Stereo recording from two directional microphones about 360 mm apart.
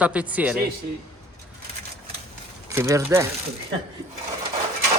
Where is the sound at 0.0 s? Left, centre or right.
Centre.